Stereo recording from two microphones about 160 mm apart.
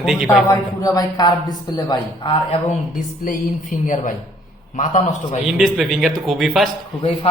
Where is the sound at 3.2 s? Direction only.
60° left (ahead or behind).